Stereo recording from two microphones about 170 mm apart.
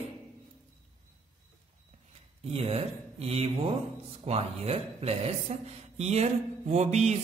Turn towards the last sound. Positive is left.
turn(degrees=-40)  # may be behind; listen again after turning